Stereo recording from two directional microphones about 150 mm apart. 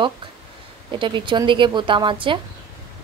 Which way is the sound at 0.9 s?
35° right (ahead or behind).